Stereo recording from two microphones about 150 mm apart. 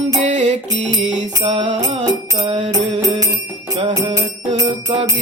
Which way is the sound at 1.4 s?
30° right (ahead or behind).